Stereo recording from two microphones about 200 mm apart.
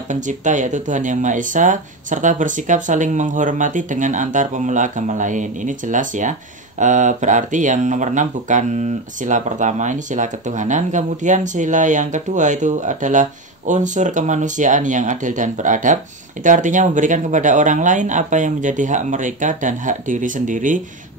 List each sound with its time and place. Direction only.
0.1 s speech: 40° right (ahead or behind)